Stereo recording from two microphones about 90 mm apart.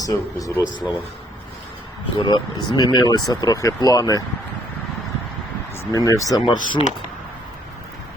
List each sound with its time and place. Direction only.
0.0 s speech: 40° left (ahead or behind)
2.1 s speech: 55° left (ahead or behind)
5.9 s speech: 40° left (ahead or behind)
6.4 s speech: 65° left (ahead or behind)